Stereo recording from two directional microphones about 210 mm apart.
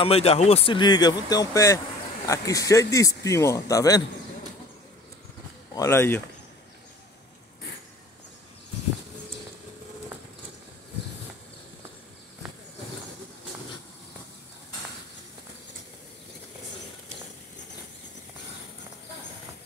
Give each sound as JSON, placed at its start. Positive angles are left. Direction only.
{"t": 0.0, "sound": "speech", "side_deg": 30}
{"t": 5.8, "sound": "speech", "side_deg": 10}